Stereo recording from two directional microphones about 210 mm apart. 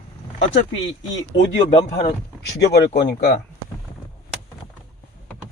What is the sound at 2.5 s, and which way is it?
Speech, 50° left (ahead or behind).